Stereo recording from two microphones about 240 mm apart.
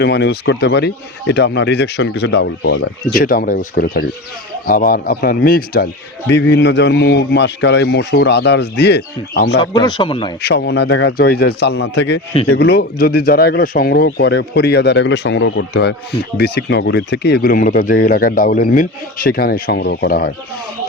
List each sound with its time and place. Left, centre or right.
0.0 s speech: left
9.6 s speech: centre
10.4 s speech: left